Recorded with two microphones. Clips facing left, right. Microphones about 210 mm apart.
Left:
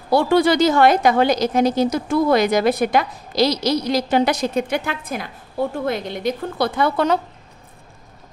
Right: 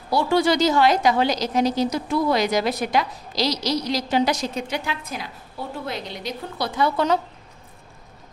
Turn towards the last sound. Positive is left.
turn(degrees=55)  # may be behind; listen again after turning